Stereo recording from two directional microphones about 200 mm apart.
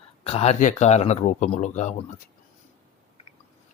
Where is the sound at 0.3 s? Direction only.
30° left (ahead or behind).